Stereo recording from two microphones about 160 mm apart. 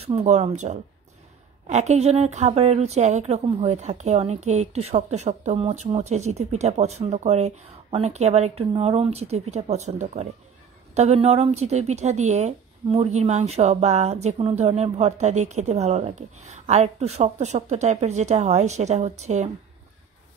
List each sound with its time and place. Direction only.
0.1 s speech: 45° right (ahead or behind)